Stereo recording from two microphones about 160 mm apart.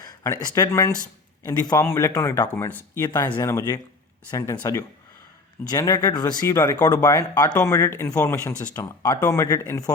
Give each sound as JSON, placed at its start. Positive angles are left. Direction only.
{"t": 0.0, "sound": "speech", "side_deg": 20}